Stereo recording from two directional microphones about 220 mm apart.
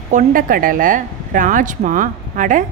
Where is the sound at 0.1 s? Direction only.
35° right (ahead or behind).